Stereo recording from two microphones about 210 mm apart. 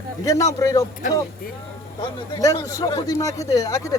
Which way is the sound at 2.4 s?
15° left (ahead or behind).